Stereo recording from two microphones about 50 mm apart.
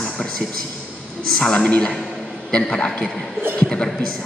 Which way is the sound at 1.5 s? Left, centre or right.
Left.